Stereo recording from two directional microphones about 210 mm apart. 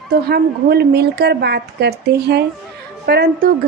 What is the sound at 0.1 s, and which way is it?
A woman's voice, 50° right (ahead or behind).